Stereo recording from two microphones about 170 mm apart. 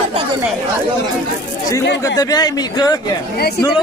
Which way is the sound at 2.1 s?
25° left (ahead or behind).